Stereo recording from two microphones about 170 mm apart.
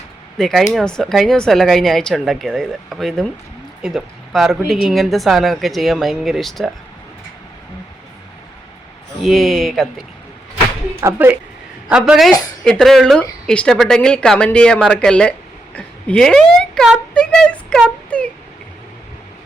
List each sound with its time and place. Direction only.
0.3 s speech: centre (ahead or behind)
9.2 s speech: centre (ahead or behind)
11.0 s speech: 10° right (ahead or behind)